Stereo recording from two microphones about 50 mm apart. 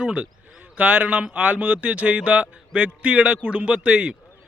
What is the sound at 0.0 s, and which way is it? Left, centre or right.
A man's voice, right.